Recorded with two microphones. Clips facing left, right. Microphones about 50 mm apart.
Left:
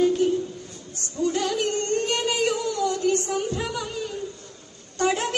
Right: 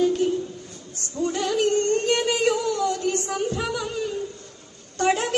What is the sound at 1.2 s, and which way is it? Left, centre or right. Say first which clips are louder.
Female singing: even; right.